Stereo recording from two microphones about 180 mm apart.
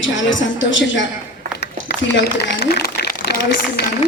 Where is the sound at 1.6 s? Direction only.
70° left (ahead or behind).